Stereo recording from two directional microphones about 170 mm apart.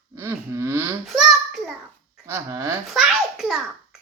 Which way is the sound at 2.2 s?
15° right (ahead or behind).